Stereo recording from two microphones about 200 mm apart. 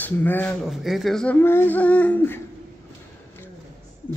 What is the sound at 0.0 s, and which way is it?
Speech, 10° left (ahead or behind).